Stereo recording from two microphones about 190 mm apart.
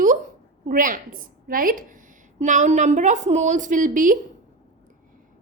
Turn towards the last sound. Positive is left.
turn(degrees=-45)  # may be behind; listen again after turning